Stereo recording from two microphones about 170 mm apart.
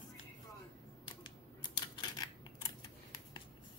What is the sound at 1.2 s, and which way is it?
Scissors, 25° left (ahead or behind).